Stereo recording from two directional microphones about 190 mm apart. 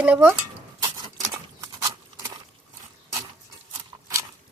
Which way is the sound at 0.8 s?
20° right (ahead or behind).